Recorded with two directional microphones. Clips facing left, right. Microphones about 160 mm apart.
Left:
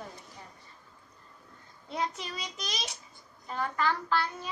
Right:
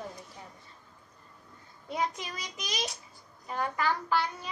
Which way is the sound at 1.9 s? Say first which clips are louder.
Right 1 dB; 10° right (ahead or behind).